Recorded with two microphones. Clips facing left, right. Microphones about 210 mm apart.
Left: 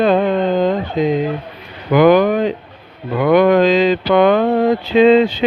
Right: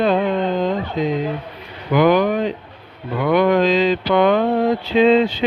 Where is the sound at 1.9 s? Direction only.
50° left (ahead or behind); by 5.3 s 70° left (ahead or behind).